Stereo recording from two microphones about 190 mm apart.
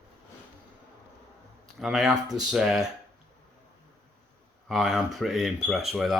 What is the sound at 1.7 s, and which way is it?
Speech, centre (ahead or behind).